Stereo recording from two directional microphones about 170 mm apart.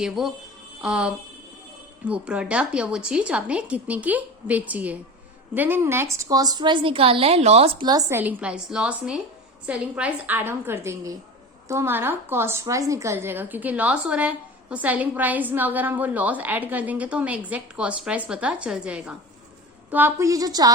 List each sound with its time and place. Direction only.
0.0 s a woman's voice: centre (ahead or behind); by 7.9 s 35° right (ahead or behind)
7.9 s a woman's voice: 20° right (ahead or behind)
8.2 s a woman's voice: 10° right (ahead or behind)